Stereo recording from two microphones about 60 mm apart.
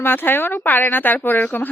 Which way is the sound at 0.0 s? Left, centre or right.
Left.